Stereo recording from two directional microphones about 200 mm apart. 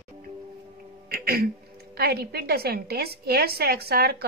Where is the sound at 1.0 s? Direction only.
50° right (ahead or behind).